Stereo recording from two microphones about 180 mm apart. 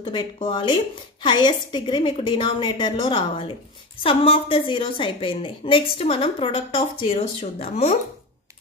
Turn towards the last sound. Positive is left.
turn(degrees=35)  # may be behind; listen again after turning